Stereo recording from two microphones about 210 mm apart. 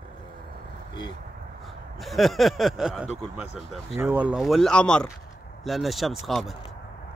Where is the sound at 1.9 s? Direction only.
Centre (ahead or behind).